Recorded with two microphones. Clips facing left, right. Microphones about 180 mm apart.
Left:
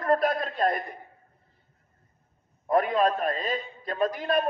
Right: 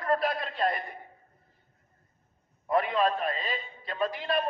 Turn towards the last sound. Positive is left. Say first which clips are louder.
# left 4 dB
turn(degrees=45)  # may be behind; listen again after turning